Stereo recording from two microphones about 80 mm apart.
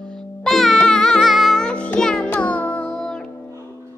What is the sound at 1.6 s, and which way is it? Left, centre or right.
Music, centre.